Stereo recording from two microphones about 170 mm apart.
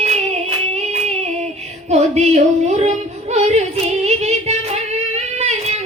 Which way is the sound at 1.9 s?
40° right (ahead or behind).